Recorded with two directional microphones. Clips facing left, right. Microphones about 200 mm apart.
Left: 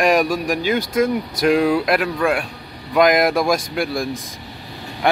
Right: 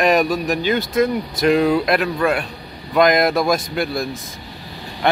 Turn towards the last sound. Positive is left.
turn(degrees=10)  # may be behind; listen again after turning